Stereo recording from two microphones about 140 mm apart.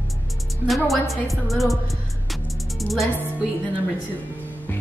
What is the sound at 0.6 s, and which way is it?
A woman's voice, centre (ahead or behind).